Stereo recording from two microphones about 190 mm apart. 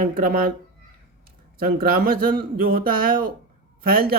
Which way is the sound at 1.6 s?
50° right (ahead or behind).